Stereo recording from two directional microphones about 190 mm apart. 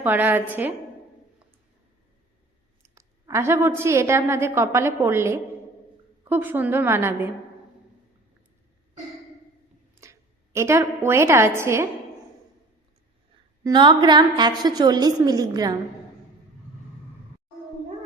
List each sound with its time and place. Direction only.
0.0 s a woman's voice: 10° right (ahead or behind)
2.8 s a woman's voice: 15° right (ahead or behind)
10.0 s a woman's voice: 15° right (ahead or behind)
13.7 s a woman's voice: 25° right (ahead or behind)